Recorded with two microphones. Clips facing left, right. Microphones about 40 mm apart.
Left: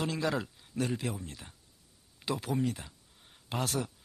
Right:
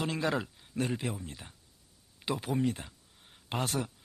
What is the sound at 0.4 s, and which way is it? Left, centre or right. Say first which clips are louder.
Speech: even; centre.